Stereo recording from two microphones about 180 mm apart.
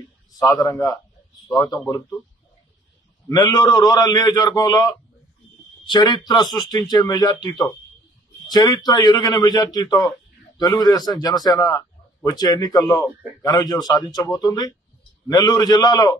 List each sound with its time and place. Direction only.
0.4 s a man's voice: 20° left (ahead or behind)
3.3 s a man's voice: 20° left (ahead or behind)